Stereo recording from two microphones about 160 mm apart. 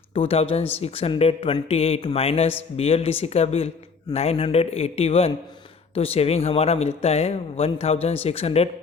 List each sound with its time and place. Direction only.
0.1 s speech: 35° left (ahead or behind)